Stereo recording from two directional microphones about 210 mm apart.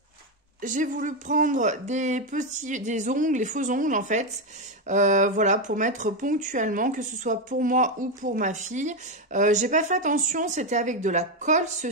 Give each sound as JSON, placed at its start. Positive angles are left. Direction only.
{"t": 0.6, "sound": "speech", "side_deg": -40}